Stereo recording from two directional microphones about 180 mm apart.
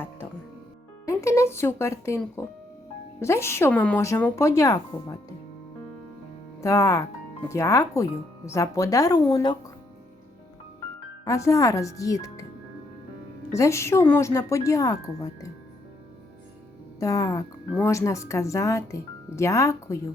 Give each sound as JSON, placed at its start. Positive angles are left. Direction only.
{"t": 1.0, "sound": "speech", "side_deg": 15}
{"t": 6.6, "sound": "speech", "side_deg": 20}
{"t": 11.3, "sound": "speech", "side_deg": 15}
{"t": 13.5, "sound": "speech", "side_deg": 15}
{"t": 17.0, "sound": "speech", "side_deg": 20}